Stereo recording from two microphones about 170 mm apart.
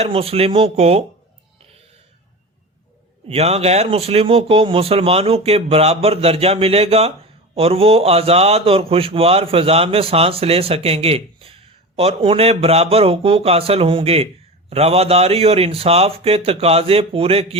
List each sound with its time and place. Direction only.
0.0 s a man's voice: 35° right (ahead or behind)
3.2 s a man's voice: 35° right (ahead or behind)